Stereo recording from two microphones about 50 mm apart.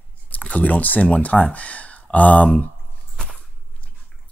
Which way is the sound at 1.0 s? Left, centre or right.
Centre.